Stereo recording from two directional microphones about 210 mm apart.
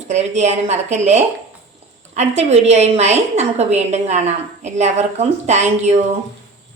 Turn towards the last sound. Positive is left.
turn(degrees=-35)  # may be behind; listen again after turning